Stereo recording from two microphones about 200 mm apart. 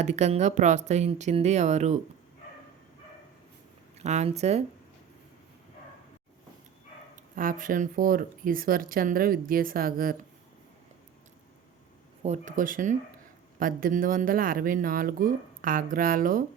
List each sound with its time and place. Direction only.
0.0 s speech: 35° right (ahead or behind)
3.9 s speech: 35° right (ahead or behind)
7.3 s speech: 45° right (ahead or behind)
12.2 s speech: 35° right (ahead or behind)